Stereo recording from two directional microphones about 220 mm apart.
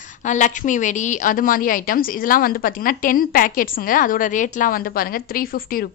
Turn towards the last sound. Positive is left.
turn(degrees=40)  # may be behind; listen again after turning